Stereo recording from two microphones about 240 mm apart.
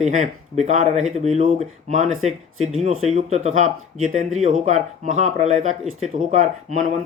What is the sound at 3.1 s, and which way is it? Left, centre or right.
Speech, right.